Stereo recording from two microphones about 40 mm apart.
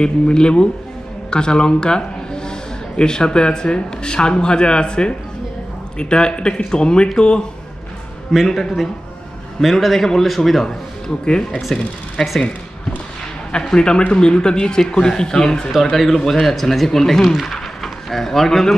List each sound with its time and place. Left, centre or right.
0.0 s a man's voice: left
8.5 s a man's voice: centre
11.7 s speech: centre
13.5 s speech: centre
15.7 s a man's voice: centre